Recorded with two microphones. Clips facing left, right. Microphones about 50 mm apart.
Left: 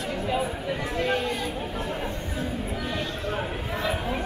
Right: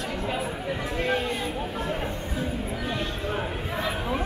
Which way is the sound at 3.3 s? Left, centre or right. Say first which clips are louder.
Even; centre.